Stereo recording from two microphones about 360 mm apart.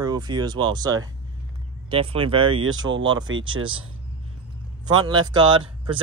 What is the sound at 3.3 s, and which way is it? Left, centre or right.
Speech, right.